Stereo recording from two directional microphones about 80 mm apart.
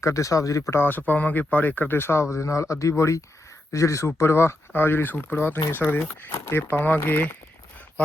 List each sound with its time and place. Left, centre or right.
0.0 s speech: left
0.7 s speech: left